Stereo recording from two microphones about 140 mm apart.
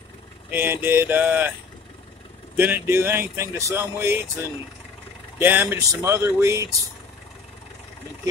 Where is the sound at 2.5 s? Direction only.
15° right (ahead or behind).